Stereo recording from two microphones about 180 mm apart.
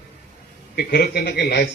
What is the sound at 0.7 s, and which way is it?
Speech, 65° left (ahead or behind).